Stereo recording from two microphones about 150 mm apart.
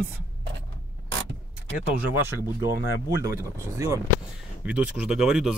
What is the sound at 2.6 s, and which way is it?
Speech, 15° right (ahead or behind).